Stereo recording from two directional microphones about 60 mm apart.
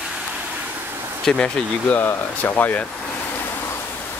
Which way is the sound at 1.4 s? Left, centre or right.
Centre.